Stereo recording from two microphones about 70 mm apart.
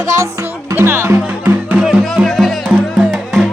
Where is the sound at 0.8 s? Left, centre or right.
Right.